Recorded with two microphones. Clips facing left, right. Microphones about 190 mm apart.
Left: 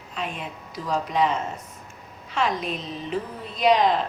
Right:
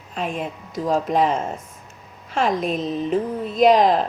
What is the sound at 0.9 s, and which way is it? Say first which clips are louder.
Speech: right 4 dB; 50° right (ahead or behind).